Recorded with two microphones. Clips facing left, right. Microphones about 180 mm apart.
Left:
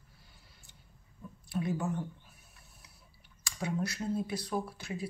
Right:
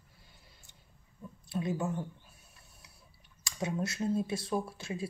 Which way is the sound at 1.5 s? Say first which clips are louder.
Even; 20° right (ahead or behind).